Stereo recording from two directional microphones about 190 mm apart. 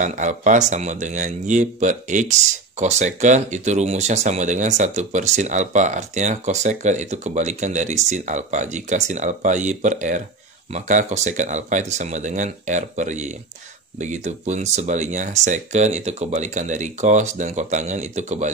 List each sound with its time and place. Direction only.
0.0 s speech: 40° right (ahead or behind)